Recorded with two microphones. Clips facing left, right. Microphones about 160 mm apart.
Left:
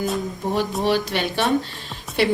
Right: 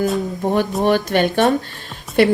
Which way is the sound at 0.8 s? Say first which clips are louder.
Right 7 dB; 50° right (ahead or behind).